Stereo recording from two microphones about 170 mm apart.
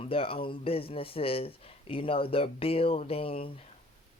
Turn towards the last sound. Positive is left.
turn(degrees=35)  # may be behind; listen again after turning